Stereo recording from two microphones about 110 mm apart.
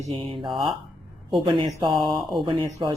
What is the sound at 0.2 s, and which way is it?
A woman's voice, 50° right (ahead or behind).